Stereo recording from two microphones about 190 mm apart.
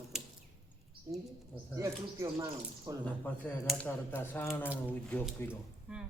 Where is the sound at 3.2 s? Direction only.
5° left (ahead or behind).